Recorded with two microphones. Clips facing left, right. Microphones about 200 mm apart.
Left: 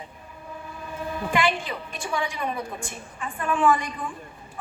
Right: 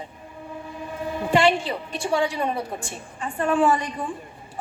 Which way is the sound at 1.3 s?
30° right (ahead or behind).